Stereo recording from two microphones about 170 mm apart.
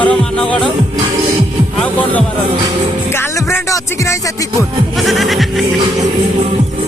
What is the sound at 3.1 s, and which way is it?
Music, 15° left (ahead or behind).